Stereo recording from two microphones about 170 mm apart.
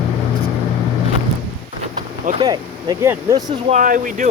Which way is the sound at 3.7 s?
50° right (ahead or behind).